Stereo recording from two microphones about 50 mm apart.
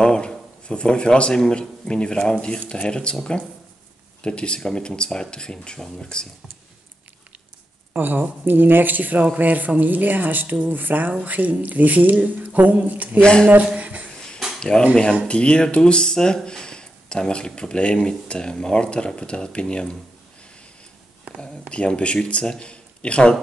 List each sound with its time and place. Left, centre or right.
0.0 s a sound: centre
1.5 s speech: centre
4.2 s speech: centre
7.9 s speech: right
13.2 s speech: centre
13.7 s a sound: right
14.7 s speech: centre
21.4 s speech: centre